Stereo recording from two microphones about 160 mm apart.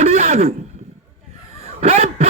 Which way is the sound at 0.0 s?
45° right (ahead or behind).